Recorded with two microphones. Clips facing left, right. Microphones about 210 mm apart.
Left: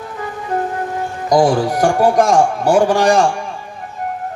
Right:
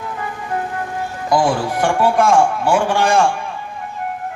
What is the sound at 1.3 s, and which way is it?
A man's voice, 40° left (ahead or behind).